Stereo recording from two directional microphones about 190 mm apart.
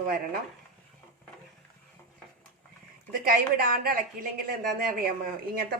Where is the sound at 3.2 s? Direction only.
50° right (ahead or behind).